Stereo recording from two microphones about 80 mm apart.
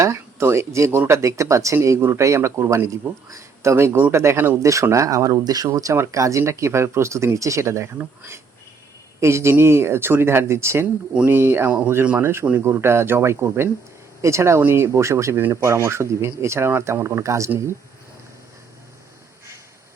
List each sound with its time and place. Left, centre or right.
0.0 s speech: right